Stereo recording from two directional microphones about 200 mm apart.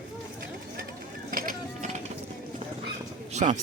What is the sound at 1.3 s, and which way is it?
Mechanisms, 45° right (ahead or behind).